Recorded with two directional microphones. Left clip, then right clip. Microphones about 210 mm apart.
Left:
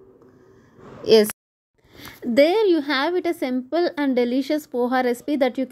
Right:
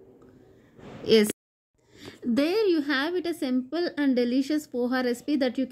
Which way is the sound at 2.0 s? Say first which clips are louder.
Left 10 dB; 15° left (ahead or behind).